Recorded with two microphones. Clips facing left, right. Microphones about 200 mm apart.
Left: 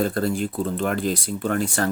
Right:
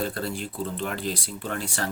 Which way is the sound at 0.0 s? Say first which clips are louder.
Left 7 dB; 45° left (ahead or behind).